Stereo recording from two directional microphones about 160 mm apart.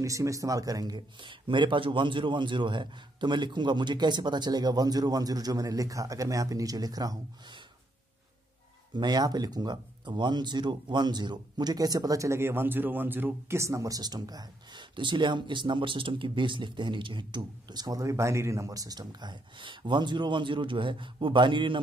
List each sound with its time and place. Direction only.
0.0 s speech: 20° right (ahead or behind)
8.9 s speech: 25° right (ahead or behind)